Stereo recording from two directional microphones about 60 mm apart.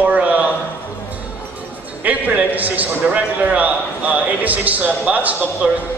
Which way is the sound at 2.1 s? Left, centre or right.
Right.